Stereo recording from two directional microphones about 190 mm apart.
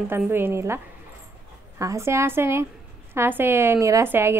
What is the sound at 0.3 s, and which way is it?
Speech, 10° right (ahead or behind).